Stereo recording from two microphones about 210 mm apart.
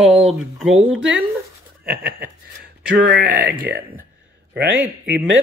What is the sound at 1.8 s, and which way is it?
Speech, 10° right (ahead or behind).